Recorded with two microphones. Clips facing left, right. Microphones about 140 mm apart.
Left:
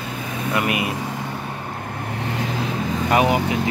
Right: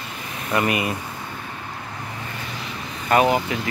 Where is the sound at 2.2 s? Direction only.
90° left.